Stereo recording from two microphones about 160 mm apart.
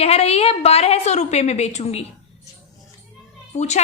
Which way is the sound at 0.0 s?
40° left (ahead or behind).